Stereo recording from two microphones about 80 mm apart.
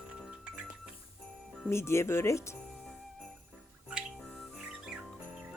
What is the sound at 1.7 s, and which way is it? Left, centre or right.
Speech, left.